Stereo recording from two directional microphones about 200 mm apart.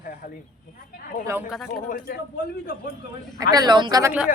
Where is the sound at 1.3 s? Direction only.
10° right (ahead or behind).